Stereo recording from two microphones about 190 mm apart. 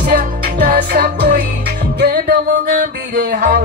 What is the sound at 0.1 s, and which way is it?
Music, 50° right (ahead or behind).